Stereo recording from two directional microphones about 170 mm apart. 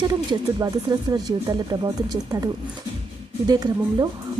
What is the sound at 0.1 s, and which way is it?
Speech, 20° right (ahead or behind).